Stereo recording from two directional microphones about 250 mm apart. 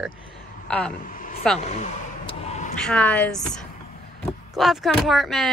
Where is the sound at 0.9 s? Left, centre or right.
Left.